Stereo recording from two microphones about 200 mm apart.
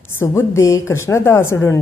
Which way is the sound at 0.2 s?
15° left (ahead or behind).